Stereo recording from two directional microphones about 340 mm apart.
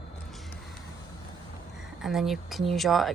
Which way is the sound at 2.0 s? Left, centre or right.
Centre.